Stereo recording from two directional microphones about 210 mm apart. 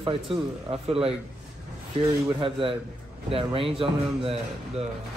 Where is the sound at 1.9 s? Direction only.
25° right (ahead or behind).